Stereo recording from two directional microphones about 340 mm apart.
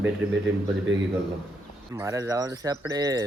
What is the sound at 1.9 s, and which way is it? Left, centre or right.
Speech, centre.